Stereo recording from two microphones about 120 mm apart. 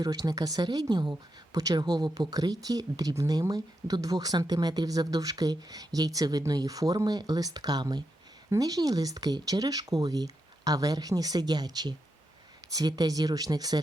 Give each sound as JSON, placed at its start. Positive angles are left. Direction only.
{"t": 0.0, "sound": "speech", "side_deg": -30}